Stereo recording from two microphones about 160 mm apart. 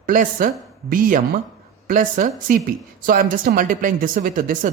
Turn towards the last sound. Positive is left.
turn(degrees=-55)  # may be behind; listen again after turning